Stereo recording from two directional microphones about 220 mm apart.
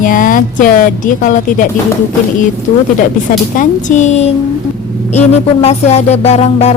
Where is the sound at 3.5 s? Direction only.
35° left (ahead or behind).